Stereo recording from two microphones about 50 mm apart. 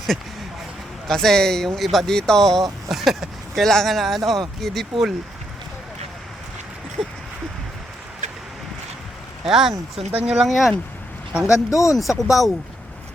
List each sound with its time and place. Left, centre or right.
1.0 s speech: centre
2.9 s speech: centre
9.4 s speech: centre
10.1 s speech: right
10.4 s speech: centre
11.4 s speech: left
11.9 s speech: centre